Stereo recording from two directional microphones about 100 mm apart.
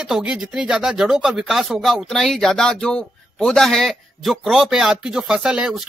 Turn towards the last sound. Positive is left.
turn(degrees=-10)  # may be behind; listen again after turning